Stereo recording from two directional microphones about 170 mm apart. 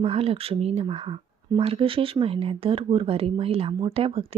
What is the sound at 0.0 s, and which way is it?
Speech, 35° right (ahead or behind).